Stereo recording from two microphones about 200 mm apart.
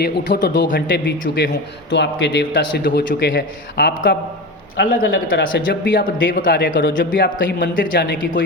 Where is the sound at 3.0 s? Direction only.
60° left (ahead or behind).